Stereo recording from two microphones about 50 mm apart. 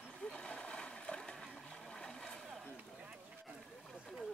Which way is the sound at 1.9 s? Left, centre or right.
Centre.